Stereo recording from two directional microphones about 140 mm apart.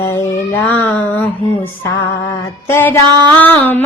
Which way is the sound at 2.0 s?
20° left (ahead or behind).